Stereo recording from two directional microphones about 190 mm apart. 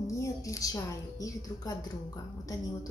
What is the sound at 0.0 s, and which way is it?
A woman's voice, 15° left (ahead or behind).